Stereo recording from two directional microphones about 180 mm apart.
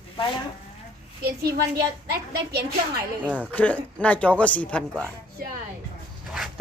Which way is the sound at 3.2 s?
10° right (ahead or behind).